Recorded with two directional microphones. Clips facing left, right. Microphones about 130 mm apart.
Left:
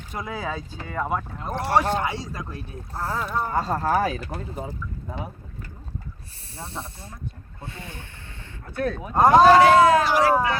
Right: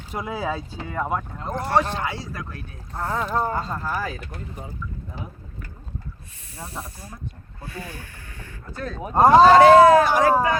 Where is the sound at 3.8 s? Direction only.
65° left (ahead or behind).